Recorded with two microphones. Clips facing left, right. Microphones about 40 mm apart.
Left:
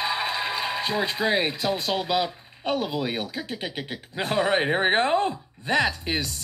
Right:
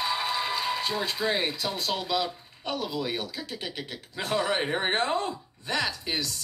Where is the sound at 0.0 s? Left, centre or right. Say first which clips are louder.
Left 2 dB; left.